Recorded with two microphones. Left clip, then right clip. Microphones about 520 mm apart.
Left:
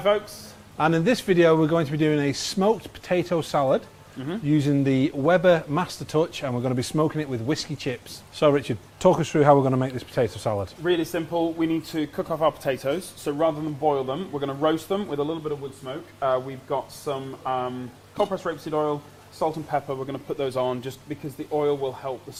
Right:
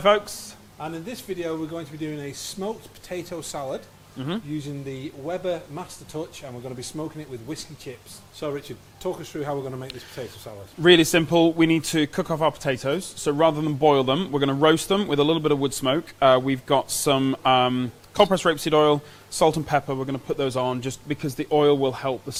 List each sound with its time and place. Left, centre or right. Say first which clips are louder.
0.8 s speech: left 12 dB; left
10.5 s speech: left 14 dB; left
10.8 s a man's voice: right 9 dB; right
15.4 s a man's voice: right 9 dB; right